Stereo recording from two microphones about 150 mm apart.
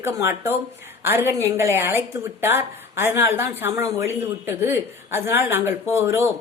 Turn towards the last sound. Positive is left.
turn(degrees=-20)  # may be behind; listen again after turning